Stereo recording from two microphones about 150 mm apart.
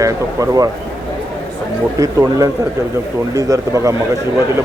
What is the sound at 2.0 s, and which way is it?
Speech, 20° right (ahead or behind).